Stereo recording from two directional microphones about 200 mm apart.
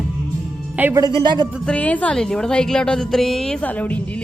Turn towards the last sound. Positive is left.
turn(degrees=5)  # may be behind; listen again after turning